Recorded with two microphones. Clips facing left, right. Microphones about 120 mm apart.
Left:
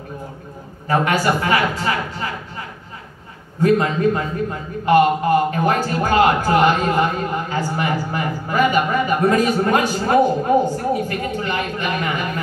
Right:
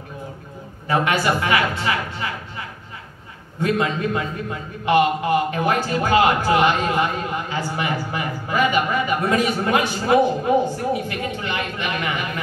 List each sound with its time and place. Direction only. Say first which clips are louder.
0.8 s a man's voice: left 2 dB; 40° left (ahead or behind)
3.6 s a man's voice: left 5 dB; 35° left (ahead or behind)